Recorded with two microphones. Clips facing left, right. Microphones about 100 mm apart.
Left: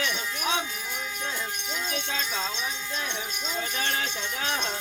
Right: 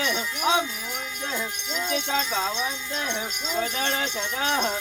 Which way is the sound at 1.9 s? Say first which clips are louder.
Right 7 dB; 25° right (ahead or behind).